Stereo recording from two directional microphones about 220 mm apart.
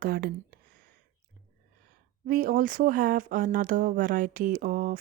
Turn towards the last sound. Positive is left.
turn(degrees=-40)  # may be behind; listen again after turning